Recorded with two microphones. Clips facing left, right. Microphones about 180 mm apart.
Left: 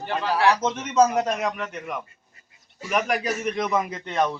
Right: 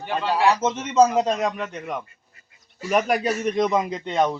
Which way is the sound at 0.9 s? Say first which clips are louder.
Right 2 dB; 25° right (ahead or behind).